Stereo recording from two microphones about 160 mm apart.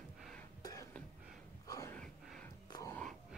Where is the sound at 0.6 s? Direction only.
25° left (ahead or behind).